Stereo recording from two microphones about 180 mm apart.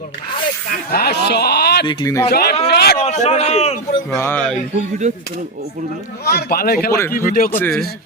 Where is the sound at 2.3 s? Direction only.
60° left (ahead or behind).